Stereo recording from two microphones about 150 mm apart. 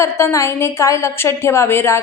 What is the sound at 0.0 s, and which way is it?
A woman's voice, 20° left (ahead or behind).